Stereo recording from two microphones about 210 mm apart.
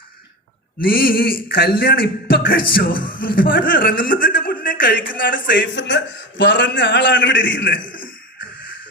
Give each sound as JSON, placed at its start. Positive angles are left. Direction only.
{"t": 0.8, "sound": "speech", "side_deg": 45}
{"t": 5.5, "sound": "a man's voice", "side_deg": 60}
{"t": 7.9, "sound": "a man's voice", "side_deg": 40}